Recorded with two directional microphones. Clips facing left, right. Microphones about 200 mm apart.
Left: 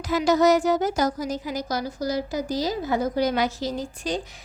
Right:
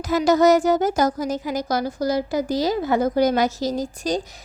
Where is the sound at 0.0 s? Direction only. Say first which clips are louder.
Right 3 dB; 45° right (ahead or behind).